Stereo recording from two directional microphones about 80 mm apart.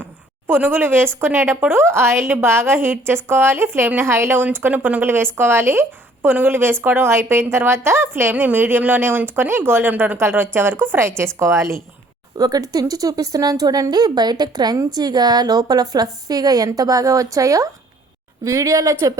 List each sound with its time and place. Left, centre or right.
0.4 s a woman's voice: right
12.4 s a woman's voice: right